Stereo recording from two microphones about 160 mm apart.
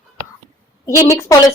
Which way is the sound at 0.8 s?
20° left (ahead or behind).